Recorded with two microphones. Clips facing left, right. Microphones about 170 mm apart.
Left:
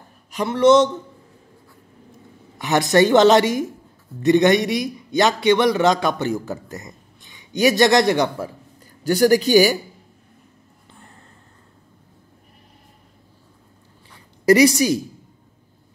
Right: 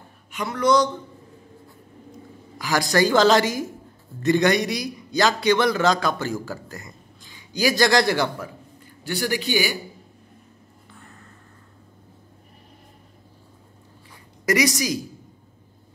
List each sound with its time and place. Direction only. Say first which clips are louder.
0.3 s a man's voice: left 6 dB; 30° left (ahead or behind)
2.6 s a man's voice: left 5 dB; 25° left (ahead or behind)
9.0 s speech: left 10 dB; 45° left (ahead or behind)
14.4 s a woman's voice: left 8 dB; 30° left (ahead or behind)